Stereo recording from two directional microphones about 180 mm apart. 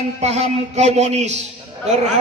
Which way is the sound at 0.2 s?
40° right (ahead or behind).